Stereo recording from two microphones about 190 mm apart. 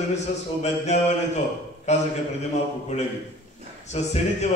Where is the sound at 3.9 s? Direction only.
35° left (ahead or behind).